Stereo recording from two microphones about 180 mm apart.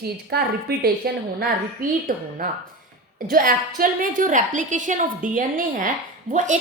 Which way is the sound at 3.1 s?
50° right (ahead or behind).